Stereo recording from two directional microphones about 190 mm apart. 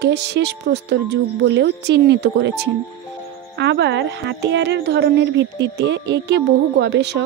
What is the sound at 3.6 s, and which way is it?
A woman's voice, 65° right (ahead or behind).